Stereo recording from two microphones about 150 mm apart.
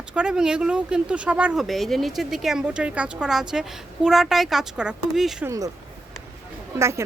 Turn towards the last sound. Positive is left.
turn(degrees=-20)  # may be behind; listen again after turning